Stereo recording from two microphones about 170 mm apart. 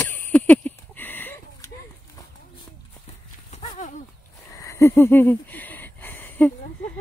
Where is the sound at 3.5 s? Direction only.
40° left (ahead or behind).